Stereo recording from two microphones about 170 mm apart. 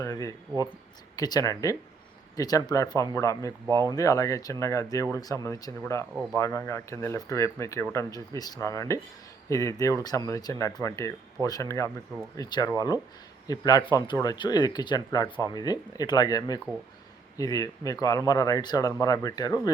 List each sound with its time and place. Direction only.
0.0 s cricket: 20° left (ahead or behind)
1.1 s speech: 20° left (ahead or behind)